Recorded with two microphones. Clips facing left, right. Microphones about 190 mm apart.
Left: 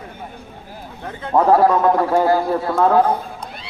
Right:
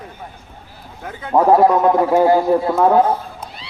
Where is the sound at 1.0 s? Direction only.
5° right (ahead or behind).